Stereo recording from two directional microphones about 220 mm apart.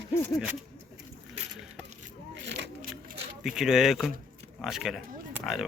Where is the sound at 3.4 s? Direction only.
Centre (ahead or behind).